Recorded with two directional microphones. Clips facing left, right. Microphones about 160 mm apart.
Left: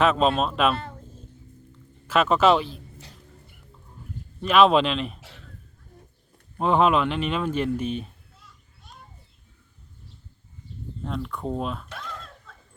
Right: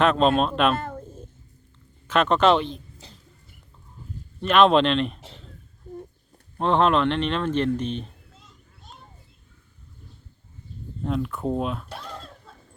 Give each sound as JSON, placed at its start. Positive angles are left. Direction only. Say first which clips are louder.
{"t": 0.0, "sound": "speech", "louder": "right 2 dB", "side_deg": 5}
{"t": 2.0, "sound": "speech", "louder": "even", "side_deg": 5}
{"t": 4.4, "sound": "speech", "louder": "right 1 dB", "side_deg": 5}
{"t": 6.6, "sound": "speech", "louder": "even", "side_deg": 5}
{"t": 11.0, "sound": "speech", "louder": "right 5 dB", "side_deg": -5}
{"t": 11.9, "sound": "a sound", "louder": "right 1 dB", "side_deg": -35}